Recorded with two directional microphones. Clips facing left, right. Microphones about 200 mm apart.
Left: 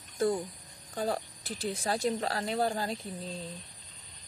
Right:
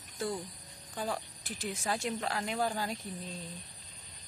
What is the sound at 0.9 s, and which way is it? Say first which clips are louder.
Speech: left 4 dB; 40° left (ahead or behind).